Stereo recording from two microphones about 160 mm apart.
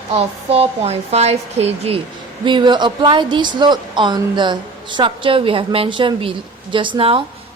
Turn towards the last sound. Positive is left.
turn(degrees=-35)  # may be behind; listen again after turning